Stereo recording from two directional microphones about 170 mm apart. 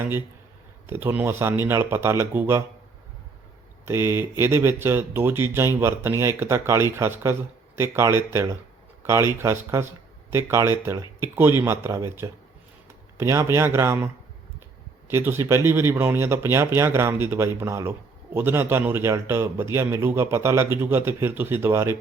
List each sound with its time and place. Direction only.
0.9 s a man's voice: 15° right (ahead or behind)
3.8 s a man's voice: 15° right (ahead or behind)
15.1 s a man's voice: 15° right (ahead or behind)